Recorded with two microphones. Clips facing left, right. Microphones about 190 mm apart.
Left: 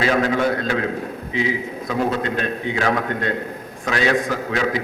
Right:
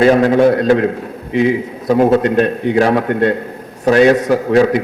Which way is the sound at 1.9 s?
45° right (ahead or behind).